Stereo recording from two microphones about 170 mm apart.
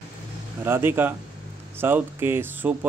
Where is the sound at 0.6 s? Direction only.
15° right (ahead or behind).